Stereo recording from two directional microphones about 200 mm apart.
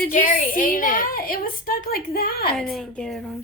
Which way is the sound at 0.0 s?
40° left (ahead or behind).